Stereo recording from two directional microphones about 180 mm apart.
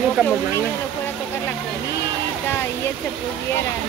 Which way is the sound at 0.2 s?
10° left (ahead or behind).